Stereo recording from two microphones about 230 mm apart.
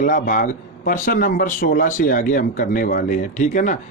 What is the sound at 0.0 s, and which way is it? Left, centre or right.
A man's voice, left.